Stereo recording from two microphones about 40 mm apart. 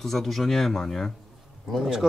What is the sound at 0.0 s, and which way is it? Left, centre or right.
Speech, centre.